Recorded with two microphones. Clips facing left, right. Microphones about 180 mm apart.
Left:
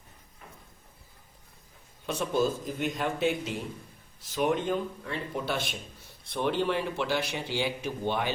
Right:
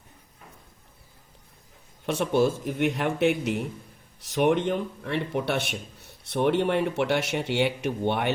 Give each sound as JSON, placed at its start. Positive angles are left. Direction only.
{"t": 2.0, "sound": "a man's voice", "side_deg": -70}